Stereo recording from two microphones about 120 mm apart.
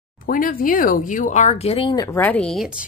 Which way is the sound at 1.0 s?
90° left.